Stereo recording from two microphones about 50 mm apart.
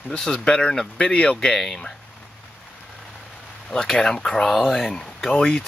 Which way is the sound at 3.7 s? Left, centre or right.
Centre.